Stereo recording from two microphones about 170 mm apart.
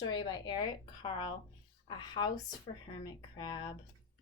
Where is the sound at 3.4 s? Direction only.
30° left (ahead or behind).